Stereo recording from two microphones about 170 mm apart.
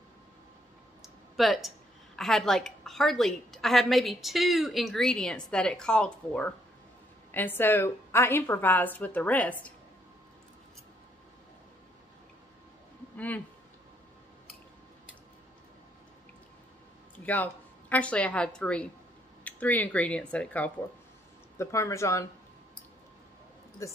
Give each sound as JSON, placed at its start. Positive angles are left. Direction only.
{"t": 1.0, "sound": "a sound", "side_deg": 0}
{"t": 2.1, "sound": "a woman's voice", "side_deg": 0}
{"t": 17.2, "sound": "a woman's voice", "side_deg": 10}
{"t": 23.8, "sound": "a woman's voice", "side_deg": 20}